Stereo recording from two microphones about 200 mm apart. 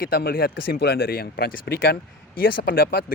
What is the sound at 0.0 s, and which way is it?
Speech, 50° left (ahead or behind).